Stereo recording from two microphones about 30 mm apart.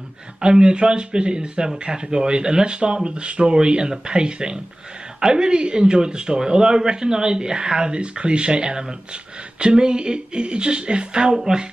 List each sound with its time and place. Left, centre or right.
0.4 s speech: right
11.3 s speech: centre